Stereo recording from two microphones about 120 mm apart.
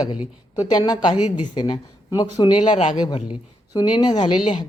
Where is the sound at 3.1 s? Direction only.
55° left (ahead or behind).